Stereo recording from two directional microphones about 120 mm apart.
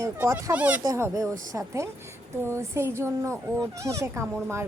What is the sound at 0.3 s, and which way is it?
Speech, 25° right (ahead or behind).